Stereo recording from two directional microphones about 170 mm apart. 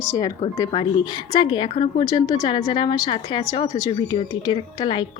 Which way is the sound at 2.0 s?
20° left (ahead or behind).